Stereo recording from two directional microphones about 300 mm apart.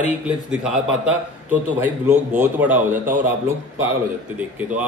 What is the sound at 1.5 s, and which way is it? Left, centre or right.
A man's voice, centre.